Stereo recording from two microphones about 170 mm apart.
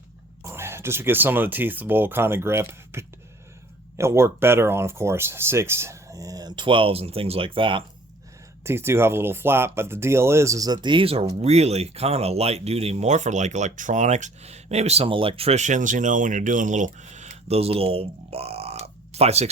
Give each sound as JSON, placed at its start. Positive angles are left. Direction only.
{"t": 0.4, "sound": "speech", "side_deg": -15}
{"t": 8.6, "sound": "speech", "side_deg": -15}